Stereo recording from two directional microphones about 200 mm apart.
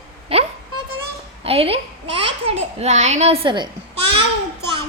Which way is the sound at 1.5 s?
30° right (ahead or behind).